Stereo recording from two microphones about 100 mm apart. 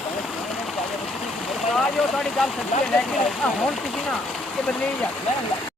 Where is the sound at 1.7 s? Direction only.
5° left (ahead or behind).